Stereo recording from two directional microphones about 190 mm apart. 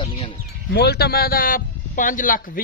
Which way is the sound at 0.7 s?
60° left (ahead or behind).